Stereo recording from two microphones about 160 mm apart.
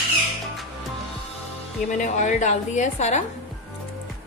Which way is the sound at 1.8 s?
50° left (ahead or behind).